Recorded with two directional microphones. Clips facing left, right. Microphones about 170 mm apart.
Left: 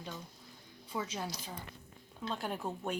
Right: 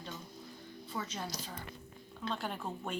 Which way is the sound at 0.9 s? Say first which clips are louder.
Left 2 dB; 10° left (ahead or behind).